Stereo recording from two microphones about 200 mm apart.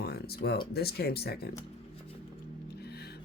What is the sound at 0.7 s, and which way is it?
Speech, 50° left (ahead or behind).